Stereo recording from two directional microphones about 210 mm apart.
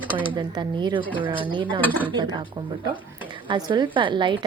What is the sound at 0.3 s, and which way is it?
A woman's voice, 20° right (ahead or behind).